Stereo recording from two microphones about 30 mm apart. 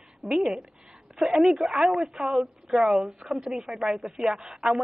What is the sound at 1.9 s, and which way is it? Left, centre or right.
A woman's voice, right.